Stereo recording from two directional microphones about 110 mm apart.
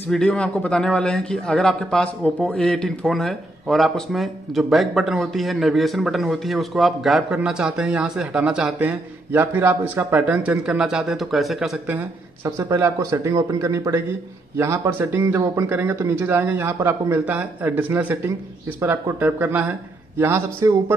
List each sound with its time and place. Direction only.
0.1 s speech: 10° left (ahead or behind); by 8.8 s 10° right (ahead or behind)
8.8 s speech: 20° right (ahead or behind); by 11.8 s centre (ahead or behind)
12.4 s speech: 30° right (ahead or behind)